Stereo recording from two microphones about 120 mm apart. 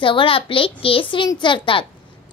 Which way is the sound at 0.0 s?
45° left (ahead or behind).